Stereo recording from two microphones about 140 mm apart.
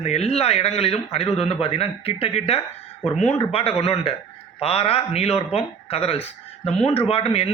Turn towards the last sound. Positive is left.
turn(degrees=45)  # may be behind; listen again after turning